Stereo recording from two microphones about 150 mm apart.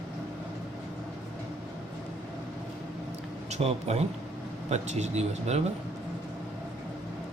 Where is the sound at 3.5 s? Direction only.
45° right (ahead or behind).